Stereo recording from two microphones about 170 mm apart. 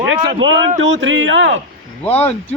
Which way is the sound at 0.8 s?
90° right.